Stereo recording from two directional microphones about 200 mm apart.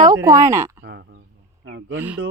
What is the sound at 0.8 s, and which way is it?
Speech, 60° right (ahead or behind).